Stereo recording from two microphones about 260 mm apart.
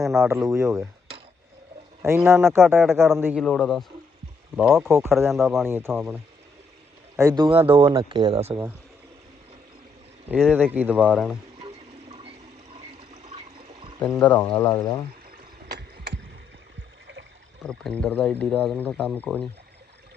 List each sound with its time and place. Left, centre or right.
0.0 s speech: centre
0.3 s a man's voice: centre
2.0 s a man's voice: centre
3.4 s a man's voice: centre
5.3 s a man's voice: centre; by 8.6 s right
10.2 s speech: centre
11.6 s a sound: centre
13.2 s toilet flush: right
14.0 s speech: centre
17.7 s speech: centre